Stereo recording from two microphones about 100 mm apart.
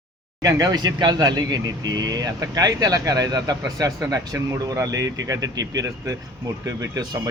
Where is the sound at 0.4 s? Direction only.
40° right (ahead or behind).